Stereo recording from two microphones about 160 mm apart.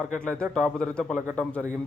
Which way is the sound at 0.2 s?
5° left (ahead or behind).